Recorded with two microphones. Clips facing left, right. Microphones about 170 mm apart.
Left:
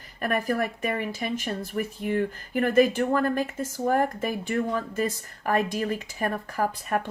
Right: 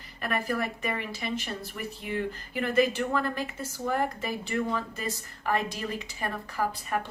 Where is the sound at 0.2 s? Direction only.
50° left (ahead or behind).